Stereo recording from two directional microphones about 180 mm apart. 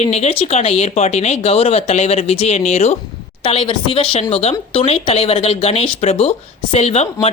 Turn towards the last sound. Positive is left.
turn(degrees=35)  # may be behind; listen again after turning